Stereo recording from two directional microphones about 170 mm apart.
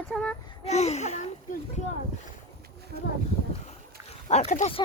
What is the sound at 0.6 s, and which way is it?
Speech, 40° left (ahead or behind).